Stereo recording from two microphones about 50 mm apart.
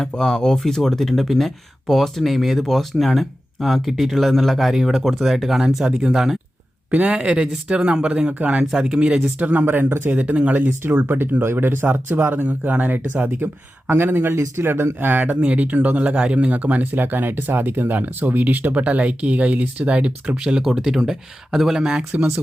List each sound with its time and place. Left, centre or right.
0.1 s speech: centre
6.9 s speech: right
9.4 s speech: right
9.6 s speech: right
10.1 s speech: right
10.5 s speech: right
13.2 s speech: right
15.4 s speech: right
20.4 s speech: centre